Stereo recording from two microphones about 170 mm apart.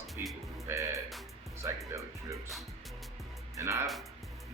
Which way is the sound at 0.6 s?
20° right (ahead or behind).